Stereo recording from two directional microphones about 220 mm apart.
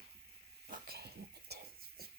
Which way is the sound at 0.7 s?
45° right (ahead or behind).